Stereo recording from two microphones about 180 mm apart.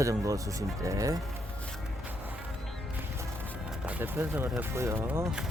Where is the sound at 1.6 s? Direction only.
Centre (ahead or behind).